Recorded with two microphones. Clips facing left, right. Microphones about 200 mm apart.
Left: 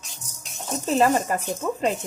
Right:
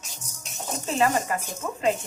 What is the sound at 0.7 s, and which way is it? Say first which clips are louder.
Speech: left 4 dB; 40° left (ahead or behind).